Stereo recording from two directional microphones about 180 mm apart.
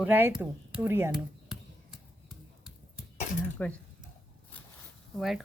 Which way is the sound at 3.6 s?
10° left (ahead or behind).